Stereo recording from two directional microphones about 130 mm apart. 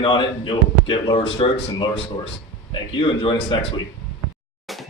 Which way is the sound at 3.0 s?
40° left (ahead or behind).